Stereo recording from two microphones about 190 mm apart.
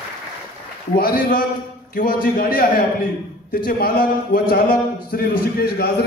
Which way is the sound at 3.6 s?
50° left (ahead or behind).